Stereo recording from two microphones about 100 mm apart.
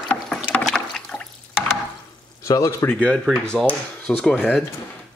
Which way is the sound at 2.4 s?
35° left (ahead or behind).